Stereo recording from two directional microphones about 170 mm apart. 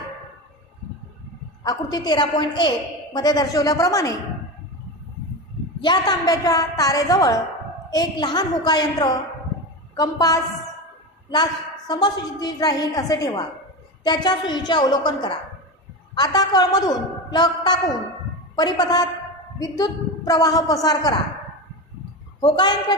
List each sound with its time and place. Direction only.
1.6 s a woman's voice: 25° left (ahead or behind)
5.8 s a woman's voice: 25° left (ahead or behind)
11.9 s a woman's voice: 25° left (ahead or behind)
22.4 s a woman's voice: 25° left (ahead or behind)